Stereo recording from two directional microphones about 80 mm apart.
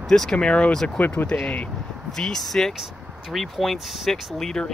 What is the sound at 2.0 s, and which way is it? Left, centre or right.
Speech, centre.